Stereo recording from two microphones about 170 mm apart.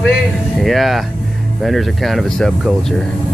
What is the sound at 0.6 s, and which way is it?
Speech, centre (ahead or behind).